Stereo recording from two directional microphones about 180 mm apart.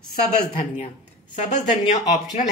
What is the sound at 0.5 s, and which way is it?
Speech, 40° left (ahead or behind).